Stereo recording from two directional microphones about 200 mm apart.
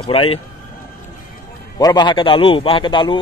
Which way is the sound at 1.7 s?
20° left (ahead or behind).